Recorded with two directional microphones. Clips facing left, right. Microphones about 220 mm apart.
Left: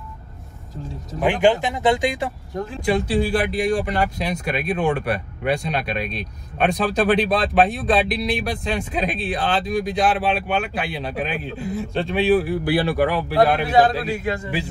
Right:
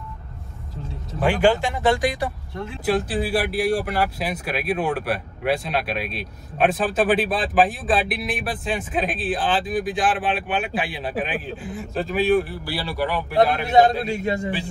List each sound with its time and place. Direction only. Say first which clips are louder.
1.2 s speech: left 1 dB; 20° left (ahead or behind)
2.8 s speech: left 2 dB; 5° right (ahead or behind)
12.6 s speech: left 9 dB; 50° left (ahead or behind)
13.3 s speech: right 2 dB; centre (ahead or behind)